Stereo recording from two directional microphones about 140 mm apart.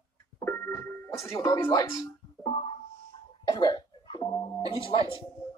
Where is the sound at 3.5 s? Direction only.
30° left (ahead or behind).